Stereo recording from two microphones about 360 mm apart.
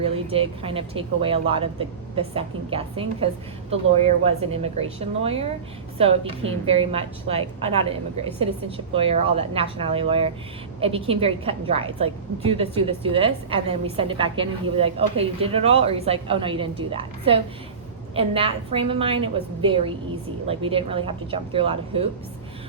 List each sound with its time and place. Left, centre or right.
0.0 s a woman's voice: centre
20.5 s a woman's voice: centre